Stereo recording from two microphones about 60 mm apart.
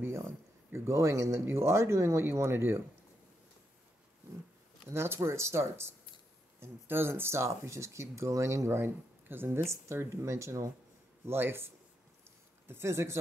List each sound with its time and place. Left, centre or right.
0.7 s speech: right
4.9 s speech: right
11.2 s speech: right